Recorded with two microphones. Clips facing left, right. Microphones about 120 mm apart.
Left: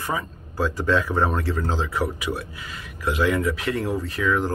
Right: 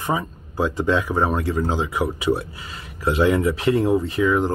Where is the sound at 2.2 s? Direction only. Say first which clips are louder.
Right 7 dB; 25° right (ahead or behind).